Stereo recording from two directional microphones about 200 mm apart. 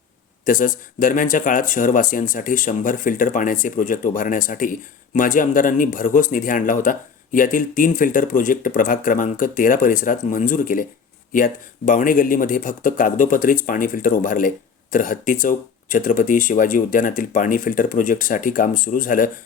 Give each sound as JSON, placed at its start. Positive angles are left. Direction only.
{"t": 0.4, "sound": "speech", "side_deg": 40}